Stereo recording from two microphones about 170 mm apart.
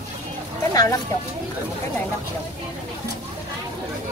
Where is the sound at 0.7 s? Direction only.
20° left (ahead or behind).